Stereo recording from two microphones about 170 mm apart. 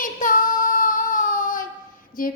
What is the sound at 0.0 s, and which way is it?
Child singing, 55° left (ahead or behind).